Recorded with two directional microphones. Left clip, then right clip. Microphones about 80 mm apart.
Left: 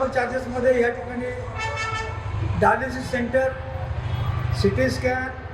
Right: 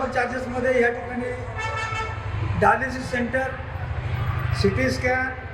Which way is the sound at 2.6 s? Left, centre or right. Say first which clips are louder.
Even; centre.